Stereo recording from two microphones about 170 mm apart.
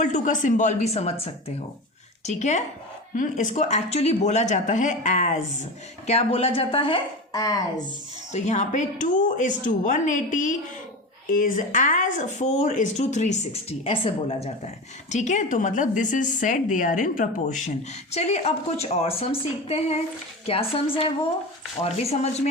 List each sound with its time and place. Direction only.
0.0 s a woman's voice: 45° left (ahead or behind); by 7.6 s 20° left (ahead or behind)
8.3 s a woman's voice: 40° left (ahead or behind)